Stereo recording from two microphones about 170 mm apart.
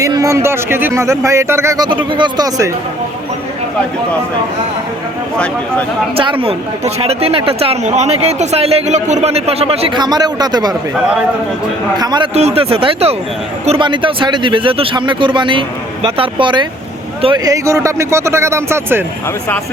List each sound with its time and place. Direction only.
0.0 s speech: 20° right (ahead or behind)
6.4 s speech: 35° right (ahead or behind)
11.9 s a man's voice: 25° right (ahead or behind)
12.3 s a man's voice: 40° right (ahead or behind); by 19.0 s 15° right (ahead or behind)